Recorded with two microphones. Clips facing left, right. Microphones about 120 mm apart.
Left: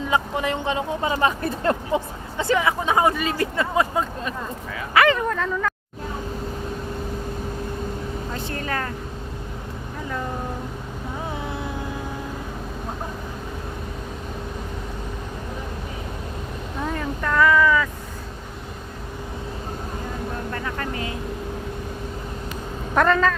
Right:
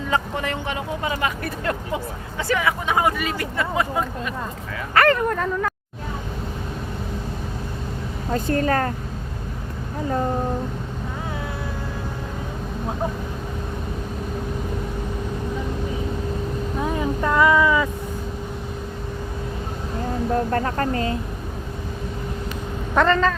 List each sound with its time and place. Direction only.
0.1 s speech: 20° left (ahead or behind)
4.9 s speech: centre (ahead or behind)
8.3 s speech: 40° right (ahead or behind)
16.8 s speech: 15° right (ahead or behind)
20.5 s speech: 45° right (ahead or behind)
23.0 s speech: 5° left (ahead or behind)